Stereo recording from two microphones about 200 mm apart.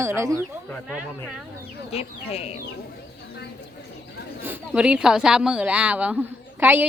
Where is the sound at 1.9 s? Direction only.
30° left (ahead or behind).